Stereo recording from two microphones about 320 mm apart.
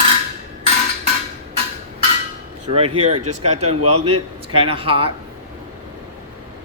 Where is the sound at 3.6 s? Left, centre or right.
Right.